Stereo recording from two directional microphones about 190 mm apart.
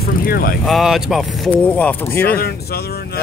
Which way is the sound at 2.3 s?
55° left (ahead or behind).